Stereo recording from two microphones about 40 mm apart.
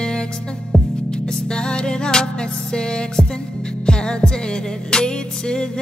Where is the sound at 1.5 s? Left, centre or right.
Left.